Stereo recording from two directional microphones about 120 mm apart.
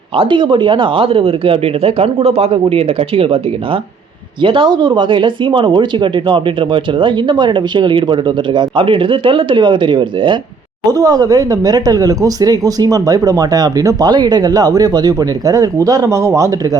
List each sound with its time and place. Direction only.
0.2 s speech: 45° right (ahead or behind)
10.8 s speech: 30° right (ahead or behind)